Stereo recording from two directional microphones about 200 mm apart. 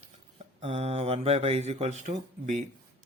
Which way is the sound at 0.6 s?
30° right (ahead or behind).